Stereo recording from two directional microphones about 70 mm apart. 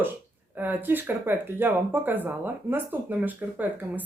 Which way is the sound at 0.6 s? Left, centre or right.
Right.